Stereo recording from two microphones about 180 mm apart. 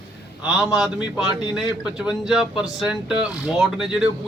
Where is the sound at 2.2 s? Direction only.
5° right (ahead or behind).